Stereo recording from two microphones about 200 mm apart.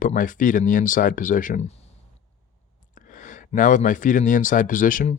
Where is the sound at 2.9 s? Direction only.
40° left (ahead or behind).